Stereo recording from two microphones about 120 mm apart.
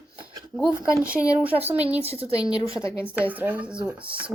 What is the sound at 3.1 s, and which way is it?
Speech, 15° right (ahead or behind).